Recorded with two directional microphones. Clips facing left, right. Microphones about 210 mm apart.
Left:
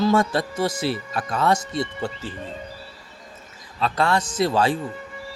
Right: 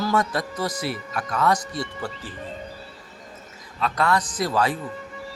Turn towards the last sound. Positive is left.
turn(degrees=30)  # may be behind; listen again after turning